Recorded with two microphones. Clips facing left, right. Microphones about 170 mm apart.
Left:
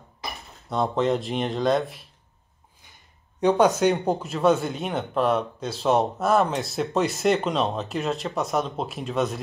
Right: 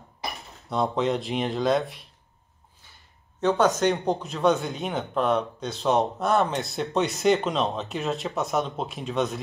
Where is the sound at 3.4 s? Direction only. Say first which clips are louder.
Left 3 dB; 15° left (ahead or behind).